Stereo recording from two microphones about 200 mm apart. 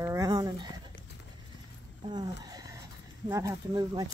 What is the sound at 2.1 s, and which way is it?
Speech, 20° right (ahead or behind).